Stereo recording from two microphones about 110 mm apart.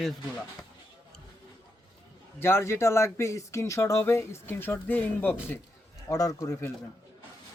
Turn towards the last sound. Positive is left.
turn(degrees=30)  # may be behind; listen again after turning